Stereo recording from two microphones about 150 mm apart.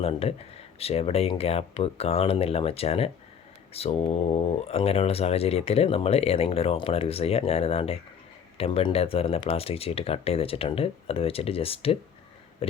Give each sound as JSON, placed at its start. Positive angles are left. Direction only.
{"t": 0.0, "sound": "speech", "side_deg": 40}